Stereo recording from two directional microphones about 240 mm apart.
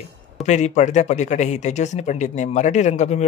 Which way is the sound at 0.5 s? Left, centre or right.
Left.